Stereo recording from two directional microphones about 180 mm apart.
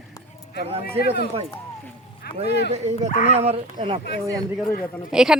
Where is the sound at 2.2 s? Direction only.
60° left (ahead or behind).